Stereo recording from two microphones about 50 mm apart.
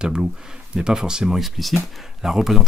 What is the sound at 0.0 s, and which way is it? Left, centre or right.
Speech, centre.